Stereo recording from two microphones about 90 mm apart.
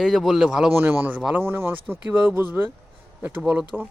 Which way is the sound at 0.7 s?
25° right (ahead or behind).